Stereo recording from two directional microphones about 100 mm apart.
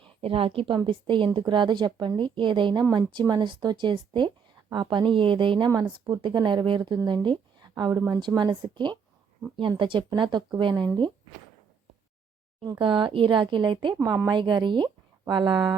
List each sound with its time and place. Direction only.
0.2 s a woman's voice: 65° right (ahead or behind); by 7.9 s 45° right (ahead or behind)
7.9 s a woman's voice: 30° right (ahead or behind)
8.4 s a woman's voice: 50° right (ahead or behind)
12.8 s speech: 55° right (ahead or behind)
14.0 s a woman's voice: 40° right (ahead or behind)